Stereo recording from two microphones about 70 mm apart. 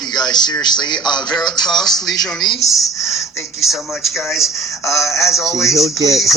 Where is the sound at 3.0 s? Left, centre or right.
Left.